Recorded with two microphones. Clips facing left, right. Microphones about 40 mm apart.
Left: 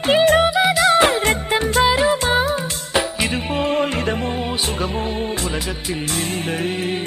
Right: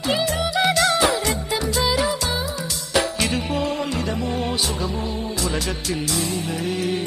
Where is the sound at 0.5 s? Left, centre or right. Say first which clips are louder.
Left 2 dB; centre.